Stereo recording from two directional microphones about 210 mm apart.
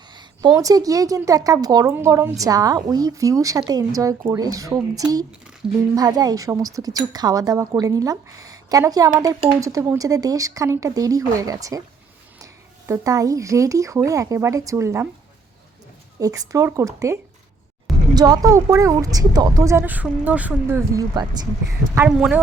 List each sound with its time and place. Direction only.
0.1 s speech: 20° right (ahead or behind)
16.2 s speech: 15° right (ahead or behind)
21.9 s a woman's voice: 5° right (ahead or behind)